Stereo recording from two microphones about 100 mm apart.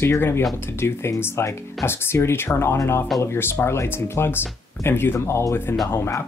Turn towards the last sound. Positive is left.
turn(degrees=25)  # may be behind; listen again after turning